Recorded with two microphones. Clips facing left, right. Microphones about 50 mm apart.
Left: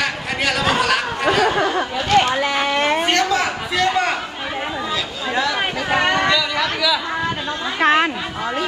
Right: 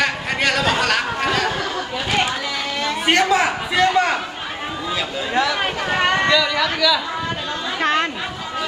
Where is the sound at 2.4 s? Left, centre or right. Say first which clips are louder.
Left 6 dB; left.